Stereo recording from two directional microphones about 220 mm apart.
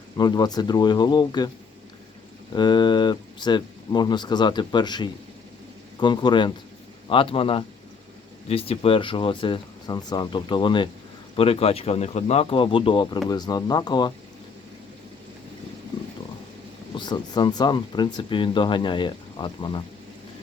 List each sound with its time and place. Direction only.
0.2 s speech: 20° left (ahead or behind)
2.6 s speech: 20° left (ahead or behind)
16.9 s speech: 20° left (ahead or behind)